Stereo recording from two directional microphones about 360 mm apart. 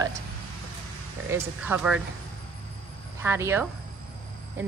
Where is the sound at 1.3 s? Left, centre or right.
Centre.